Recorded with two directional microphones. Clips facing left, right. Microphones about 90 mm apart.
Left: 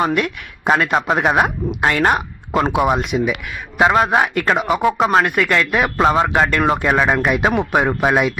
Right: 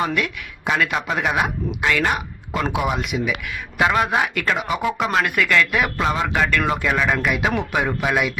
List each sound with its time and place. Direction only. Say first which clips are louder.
0.0 s speech: left 4 dB; 40° left (ahead or behind)